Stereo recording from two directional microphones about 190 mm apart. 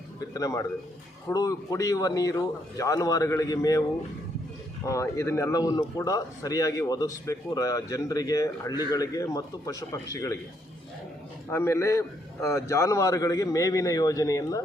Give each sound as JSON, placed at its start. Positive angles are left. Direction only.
{"t": 0.3, "sound": "speech", "side_deg": 20}
{"t": 4.9, "sound": "speech", "side_deg": 15}
{"t": 11.5, "sound": "speech", "side_deg": 15}